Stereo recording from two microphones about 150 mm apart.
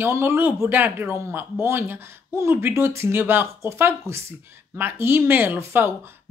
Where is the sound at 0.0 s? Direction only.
15° right (ahead or behind).